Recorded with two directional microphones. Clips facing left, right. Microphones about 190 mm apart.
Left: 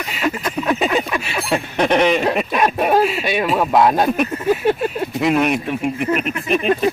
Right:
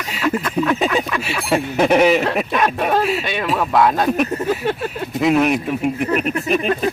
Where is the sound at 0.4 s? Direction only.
15° left (ahead or behind).